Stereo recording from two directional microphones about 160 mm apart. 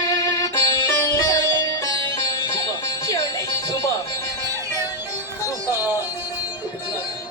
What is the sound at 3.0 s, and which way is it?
Music, 20° left (ahead or behind).